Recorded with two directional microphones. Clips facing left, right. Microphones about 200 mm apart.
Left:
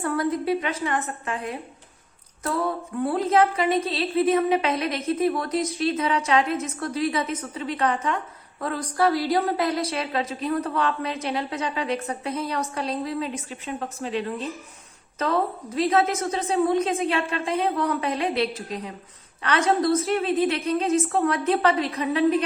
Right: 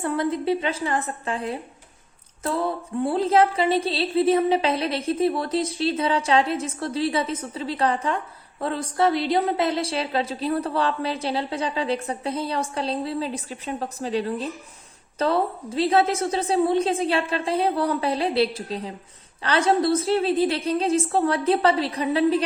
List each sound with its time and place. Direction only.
0.0 s a woman's voice: 25° right (ahead or behind)
2.4 s a sound: 25° right (ahead or behind)
8.6 s a woman's voice: 25° right (ahead or behind)